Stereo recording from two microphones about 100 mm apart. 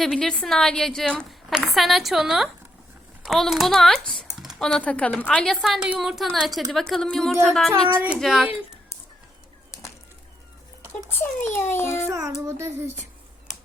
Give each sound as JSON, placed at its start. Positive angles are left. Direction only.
{"t": 0.0, "sound": "a woman's voice", "side_deg": 5}
{"t": 4.4, "sound": "typing", "side_deg": 0}
{"t": 4.8, "sound": "a woman's voice", "side_deg": 15}
{"t": 7.9, "sound": "speech", "side_deg": -10}
{"t": 8.2, "sound": "a woman's voice", "side_deg": 0}
{"t": 11.5, "sound": "a child's voice", "side_deg": 25}
{"t": 12.1, "sound": "child singing", "side_deg": -35}